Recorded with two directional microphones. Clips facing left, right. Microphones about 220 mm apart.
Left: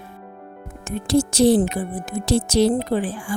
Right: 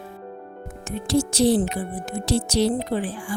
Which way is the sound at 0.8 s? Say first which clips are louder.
Left 3 dB; 50° left (ahead or behind).